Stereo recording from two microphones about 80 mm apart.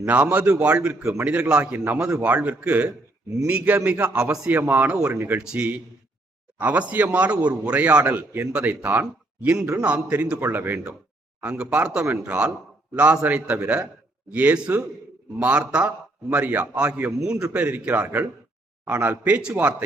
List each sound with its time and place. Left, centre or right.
0.0 s speech: centre
1.7 s a man's voice: right; by 4.5 s centre
4.7 s a man's voice: right
5.4 s speech: centre
11.4 s a man's voice: centre